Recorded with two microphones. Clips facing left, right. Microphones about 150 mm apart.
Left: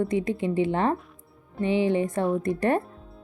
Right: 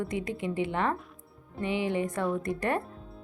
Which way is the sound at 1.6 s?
30° left (ahead or behind).